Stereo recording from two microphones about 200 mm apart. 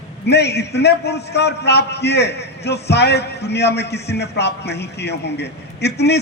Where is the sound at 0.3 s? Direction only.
55° left (ahead or behind).